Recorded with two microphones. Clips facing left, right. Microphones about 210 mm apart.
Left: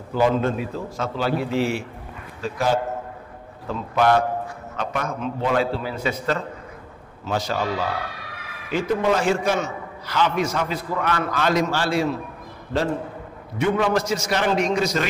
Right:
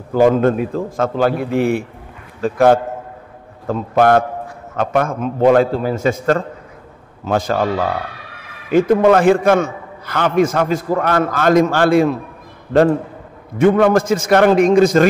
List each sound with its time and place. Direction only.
0.1 s a man's voice: 50° right (ahead or behind)
13.6 s a man's voice: 55° right (ahead or behind)